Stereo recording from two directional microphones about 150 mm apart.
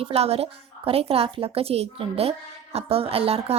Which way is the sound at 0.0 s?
40° right (ahead or behind).